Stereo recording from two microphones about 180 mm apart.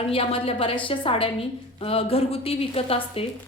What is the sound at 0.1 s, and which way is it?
A woman's voice, 30° left (ahead or behind).